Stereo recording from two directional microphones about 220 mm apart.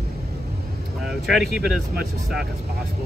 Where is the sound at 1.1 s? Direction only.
Centre (ahead or behind).